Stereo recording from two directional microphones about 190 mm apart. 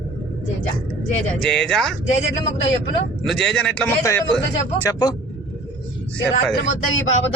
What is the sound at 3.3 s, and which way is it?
Speech, centre (ahead or behind).